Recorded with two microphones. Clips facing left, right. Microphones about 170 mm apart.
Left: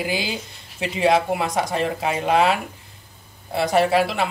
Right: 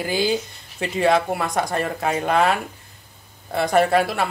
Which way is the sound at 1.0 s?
15° left (ahead or behind).